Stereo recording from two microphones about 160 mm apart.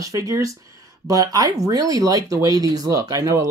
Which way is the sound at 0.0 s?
20° right (ahead or behind).